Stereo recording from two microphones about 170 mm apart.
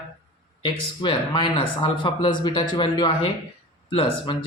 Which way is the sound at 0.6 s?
30° left (ahead or behind).